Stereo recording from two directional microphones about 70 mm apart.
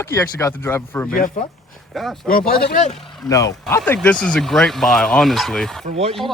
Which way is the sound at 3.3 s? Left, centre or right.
Left.